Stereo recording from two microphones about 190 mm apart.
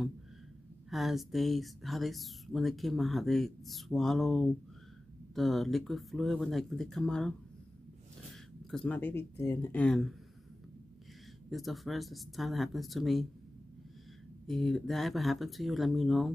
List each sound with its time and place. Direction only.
0.8 s speech: centre (ahead or behind)
8.6 s speech: 5° left (ahead or behind)
11.5 s speech: centre (ahead or behind)
14.5 s speech: centre (ahead or behind)